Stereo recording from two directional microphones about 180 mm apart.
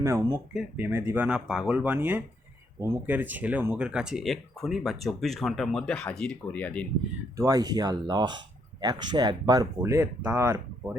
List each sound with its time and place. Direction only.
0.0 s speech: 15° right (ahead or behind); by 6.8 s 5° left (ahead or behind)
7.3 s speech: 20° right (ahead or behind)